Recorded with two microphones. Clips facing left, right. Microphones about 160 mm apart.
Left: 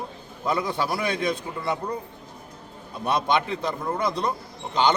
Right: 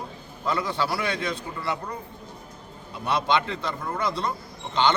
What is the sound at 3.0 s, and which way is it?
A man's voice, 20° left (ahead or behind).